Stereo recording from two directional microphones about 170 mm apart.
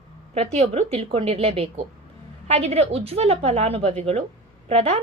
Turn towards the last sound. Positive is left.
turn(degrees=-35)  # may be behind; listen again after turning